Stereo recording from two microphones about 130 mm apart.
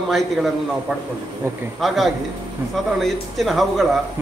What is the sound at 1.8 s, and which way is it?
Speech, centre (ahead or behind).